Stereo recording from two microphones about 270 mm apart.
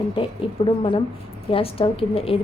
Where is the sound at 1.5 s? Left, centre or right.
Left.